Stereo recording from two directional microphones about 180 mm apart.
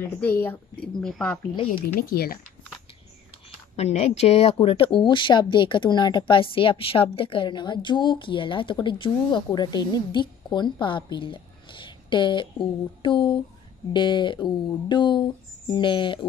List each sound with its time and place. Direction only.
0.0 s a woman's voice: 10° left (ahead or behind)
2.0 s speech: 55° left (ahead or behind)
3.7 s speech: 35° left (ahead or behind)